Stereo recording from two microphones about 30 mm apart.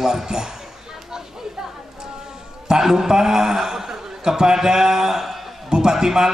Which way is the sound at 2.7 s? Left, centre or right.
Centre.